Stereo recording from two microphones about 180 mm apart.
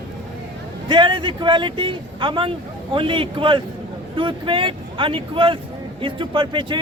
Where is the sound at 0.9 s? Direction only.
25° right (ahead or behind).